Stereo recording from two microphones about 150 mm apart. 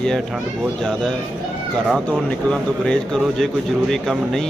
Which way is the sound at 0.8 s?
5° left (ahead or behind).